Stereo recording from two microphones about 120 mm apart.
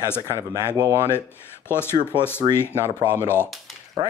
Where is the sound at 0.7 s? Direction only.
25° right (ahead or behind).